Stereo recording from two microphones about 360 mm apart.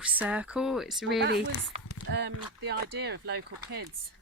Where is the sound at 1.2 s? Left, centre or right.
Right.